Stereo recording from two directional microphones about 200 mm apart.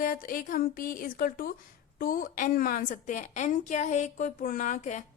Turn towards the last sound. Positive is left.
turn(degrees=35)  # may be behind; listen again after turning